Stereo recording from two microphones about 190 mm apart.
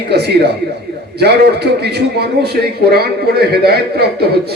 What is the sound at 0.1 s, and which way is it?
A man's voice, 60° right (ahead or behind).